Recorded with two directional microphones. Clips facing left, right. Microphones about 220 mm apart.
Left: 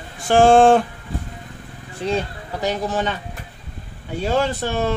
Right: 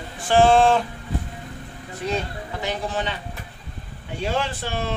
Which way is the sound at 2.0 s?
35° left (ahead or behind).